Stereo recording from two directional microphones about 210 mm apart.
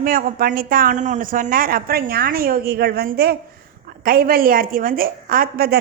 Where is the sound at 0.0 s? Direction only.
45° right (ahead or behind).